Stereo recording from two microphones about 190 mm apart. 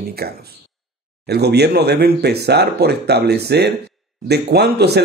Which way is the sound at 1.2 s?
60° right (ahead or behind).